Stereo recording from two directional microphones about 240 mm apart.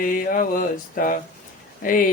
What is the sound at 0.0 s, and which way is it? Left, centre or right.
Speech, left.